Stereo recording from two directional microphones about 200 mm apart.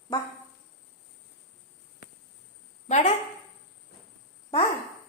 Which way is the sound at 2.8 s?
35° left (ahead or behind).